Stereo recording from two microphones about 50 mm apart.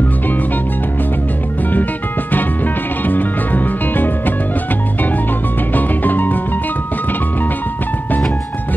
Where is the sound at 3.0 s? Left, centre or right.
Left.